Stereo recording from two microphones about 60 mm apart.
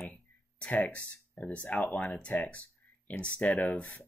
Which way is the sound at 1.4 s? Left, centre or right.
Left.